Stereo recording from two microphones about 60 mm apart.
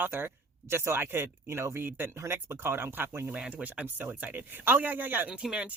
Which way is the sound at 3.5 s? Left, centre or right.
Right.